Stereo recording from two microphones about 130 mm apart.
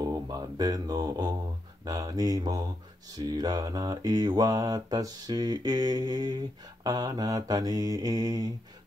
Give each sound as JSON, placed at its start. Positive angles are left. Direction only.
{"t": 0.0, "sound": "mantra", "side_deg": -30}
{"t": 1.9, "sound": "speech", "side_deg": -30}
{"t": 3.2, "sound": "mantra", "side_deg": -30}